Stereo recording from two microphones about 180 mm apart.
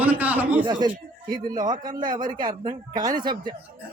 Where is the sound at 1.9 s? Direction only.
25° right (ahead or behind).